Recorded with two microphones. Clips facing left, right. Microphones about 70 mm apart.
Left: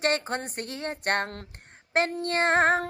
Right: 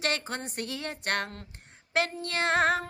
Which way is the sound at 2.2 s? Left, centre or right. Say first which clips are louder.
Left 4 dB; left.